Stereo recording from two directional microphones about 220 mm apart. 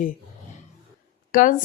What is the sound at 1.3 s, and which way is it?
Speech, 40° left (ahead or behind).